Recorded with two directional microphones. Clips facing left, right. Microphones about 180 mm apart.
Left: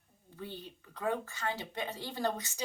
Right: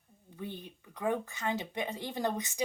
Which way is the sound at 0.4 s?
15° right (ahead or behind).